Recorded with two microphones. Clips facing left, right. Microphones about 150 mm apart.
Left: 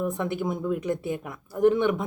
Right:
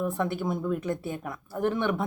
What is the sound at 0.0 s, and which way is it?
Speech, 20° left (ahead or behind).